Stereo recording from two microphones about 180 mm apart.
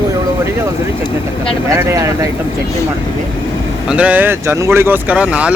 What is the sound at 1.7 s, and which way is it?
Speech, 15° right (ahead or behind).